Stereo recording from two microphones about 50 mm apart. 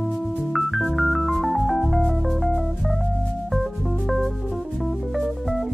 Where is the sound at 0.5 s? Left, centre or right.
Centre.